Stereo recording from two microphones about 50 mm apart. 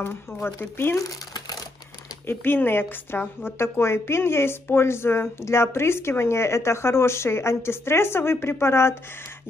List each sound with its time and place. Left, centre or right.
0.3 s a woman's voice: left
2.2 s a woman's voice: left